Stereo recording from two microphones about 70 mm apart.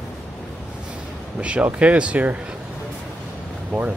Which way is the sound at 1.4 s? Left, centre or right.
Centre.